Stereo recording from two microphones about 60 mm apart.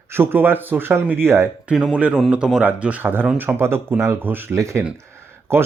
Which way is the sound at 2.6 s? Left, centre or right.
Right.